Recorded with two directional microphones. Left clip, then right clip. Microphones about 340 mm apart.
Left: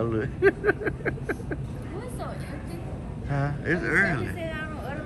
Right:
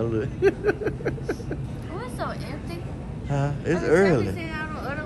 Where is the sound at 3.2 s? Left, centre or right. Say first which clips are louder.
Right 2 dB; centre.